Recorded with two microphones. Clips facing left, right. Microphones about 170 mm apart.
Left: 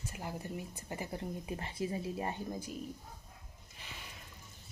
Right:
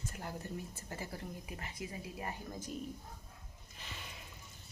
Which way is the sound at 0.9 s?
20° left (ahead or behind).